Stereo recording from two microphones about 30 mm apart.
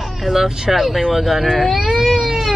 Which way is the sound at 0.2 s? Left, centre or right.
Centre.